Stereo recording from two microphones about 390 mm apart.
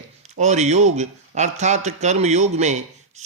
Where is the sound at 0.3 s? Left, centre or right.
Centre.